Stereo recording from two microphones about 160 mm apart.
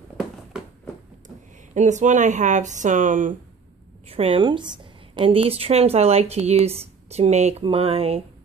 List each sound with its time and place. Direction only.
1.7 s speech: 50° right (ahead or behind)
4.1 s a woman's voice: 35° right (ahead or behind)